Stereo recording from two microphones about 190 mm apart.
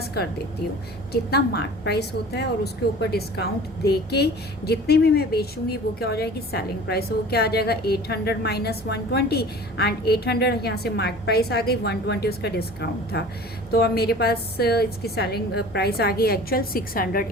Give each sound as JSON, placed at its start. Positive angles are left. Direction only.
{"t": 1.1, "sound": "speech", "side_deg": 55}